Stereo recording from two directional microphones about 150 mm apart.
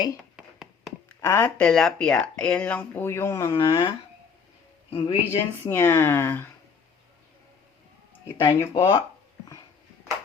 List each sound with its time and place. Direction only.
0.3 s a sound: centre (ahead or behind)
1.0 s speech: 15° left (ahead or behind)
3.5 s speech: 30° left (ahead or behind)
4.9 s speech: 40° left (ahead or behind)
5.3 s speech: 15° left (ahead or behind)
8.4 s speech: 35° left (ahead or behind)